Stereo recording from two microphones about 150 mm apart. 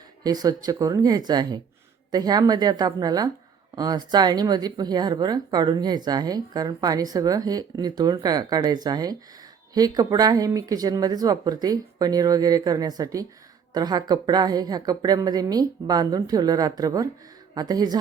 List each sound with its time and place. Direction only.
0.3 s speech: 25° right (ahead or behind)